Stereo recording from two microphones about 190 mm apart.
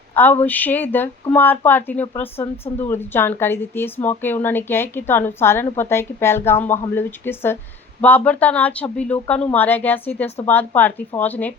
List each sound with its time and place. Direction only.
0.1 s speech: 10° left (ahead or behind)